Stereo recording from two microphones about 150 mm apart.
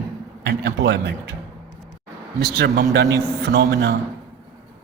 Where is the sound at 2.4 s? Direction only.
90° right.